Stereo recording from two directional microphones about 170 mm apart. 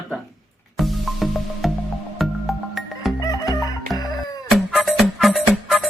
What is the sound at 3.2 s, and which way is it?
Music, 20° left (ahead or behind).